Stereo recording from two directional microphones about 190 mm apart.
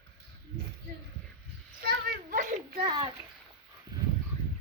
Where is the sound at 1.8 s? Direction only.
50° right (ahead or behind).